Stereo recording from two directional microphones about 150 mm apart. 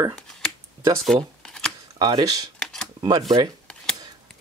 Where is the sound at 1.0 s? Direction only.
5° left (ahead or behind).